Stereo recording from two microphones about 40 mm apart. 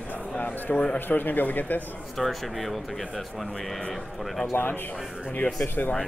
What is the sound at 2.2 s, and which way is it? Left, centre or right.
Speech, centre.